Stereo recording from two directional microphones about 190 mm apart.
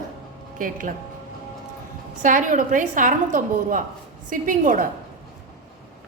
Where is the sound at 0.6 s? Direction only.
45° right (ahead or behind).